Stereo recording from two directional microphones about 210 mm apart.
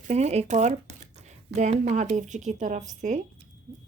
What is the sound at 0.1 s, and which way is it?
A woman's voice, 30° right (ahead or behind).